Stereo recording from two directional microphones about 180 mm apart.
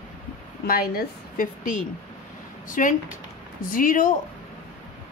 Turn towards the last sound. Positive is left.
turn(degrees=50)  # may be behind; listen again after turning